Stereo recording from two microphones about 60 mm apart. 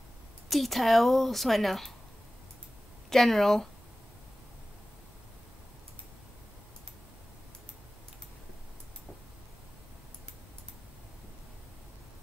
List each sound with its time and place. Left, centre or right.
0.5 s a woman's voice: centre
3.1 s speech: centre